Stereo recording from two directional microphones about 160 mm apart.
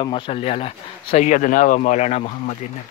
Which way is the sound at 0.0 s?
35° left (ahead or behind).